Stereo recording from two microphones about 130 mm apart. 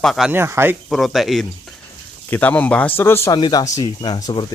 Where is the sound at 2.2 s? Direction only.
15° left (ahead or behind).